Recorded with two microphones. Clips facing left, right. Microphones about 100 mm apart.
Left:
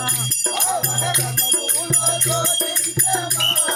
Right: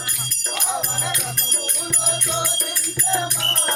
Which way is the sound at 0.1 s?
40° left (ahead or behind).